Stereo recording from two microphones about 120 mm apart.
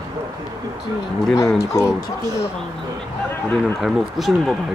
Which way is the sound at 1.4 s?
25° left (ahead or behind).